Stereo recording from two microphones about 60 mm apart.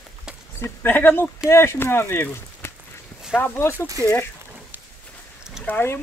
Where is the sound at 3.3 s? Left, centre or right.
Left.